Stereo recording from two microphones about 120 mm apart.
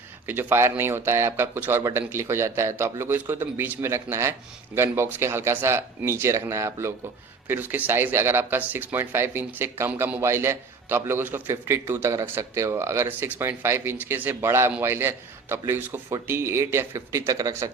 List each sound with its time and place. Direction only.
0.3 s speech: 15° right (ahead or behind)